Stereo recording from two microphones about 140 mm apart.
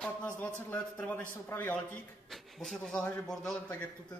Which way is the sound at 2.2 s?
Centre (ahead or behind).